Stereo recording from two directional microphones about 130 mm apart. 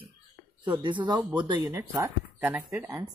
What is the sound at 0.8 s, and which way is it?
Speech, 35° right (ahead or behind).